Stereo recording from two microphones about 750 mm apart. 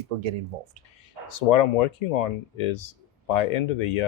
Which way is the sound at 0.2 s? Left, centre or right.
Right.